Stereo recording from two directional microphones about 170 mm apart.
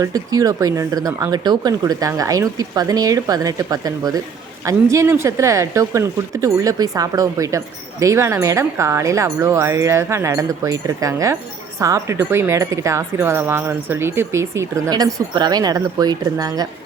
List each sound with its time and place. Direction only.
0.0 s speech: 20° right (ahead or behind)